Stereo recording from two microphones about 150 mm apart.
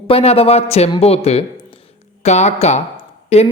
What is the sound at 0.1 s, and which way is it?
A man's voice, 40° left (ahead or behind).